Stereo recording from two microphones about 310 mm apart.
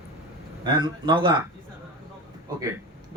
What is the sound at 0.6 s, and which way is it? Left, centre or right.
Speech, centre.